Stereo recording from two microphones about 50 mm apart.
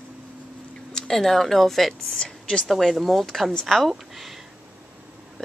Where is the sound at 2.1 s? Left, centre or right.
Centre.